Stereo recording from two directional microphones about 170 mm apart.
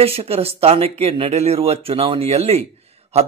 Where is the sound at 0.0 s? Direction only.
35° right (ahead or behind).